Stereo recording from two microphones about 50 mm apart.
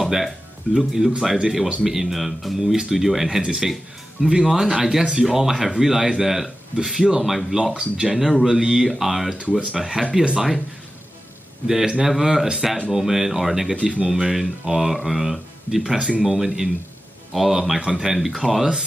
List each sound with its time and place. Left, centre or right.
0.0 s speech: centre
7.7 s speech: right
8.1 s speech: centre
11.6 s speech: centre
13.8 s speech: centre